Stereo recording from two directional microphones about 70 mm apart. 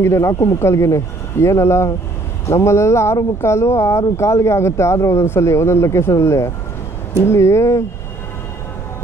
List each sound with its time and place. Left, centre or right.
0.0 s speech: left